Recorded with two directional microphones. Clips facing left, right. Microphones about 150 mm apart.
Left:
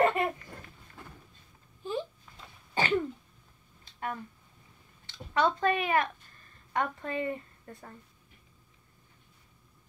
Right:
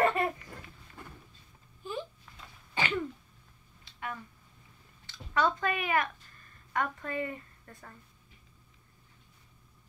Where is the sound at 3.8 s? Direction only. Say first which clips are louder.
Left 4 dB; 40° left (ahead or behind).